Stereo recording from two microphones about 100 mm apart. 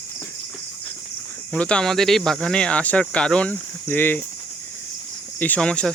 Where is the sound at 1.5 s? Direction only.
10° left (ahead or behind).